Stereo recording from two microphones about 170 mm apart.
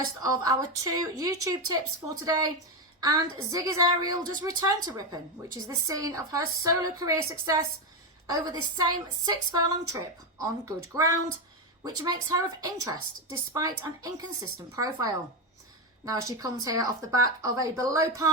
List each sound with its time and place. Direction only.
0.2 s a woman's voice: 20° right (ahead or behind)